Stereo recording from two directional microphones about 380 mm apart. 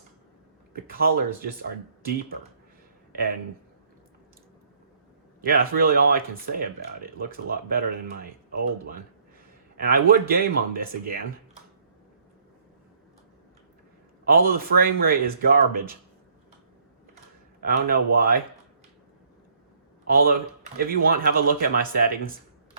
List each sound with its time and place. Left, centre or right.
0.7 s speech: right
5.4 s speech: right
9.7 s speech: right
14.3 s speech: right
17.6 s speech: right
20.1 s speech: right